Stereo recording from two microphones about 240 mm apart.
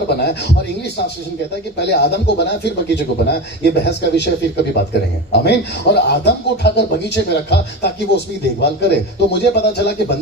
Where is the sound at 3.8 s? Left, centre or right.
Left.